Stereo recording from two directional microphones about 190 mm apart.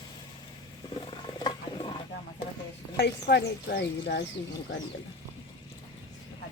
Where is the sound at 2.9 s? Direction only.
60° left (ahead or behind).